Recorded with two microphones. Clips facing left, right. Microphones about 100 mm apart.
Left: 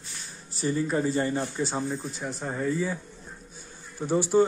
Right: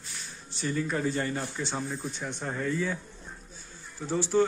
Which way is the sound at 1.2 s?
20° left (ahead or behind).